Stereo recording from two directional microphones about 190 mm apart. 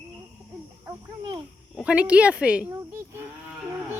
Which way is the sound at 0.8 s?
25° right (ahead or behind).